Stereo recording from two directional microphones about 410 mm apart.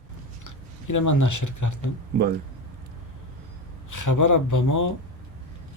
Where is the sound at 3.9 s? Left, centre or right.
Left.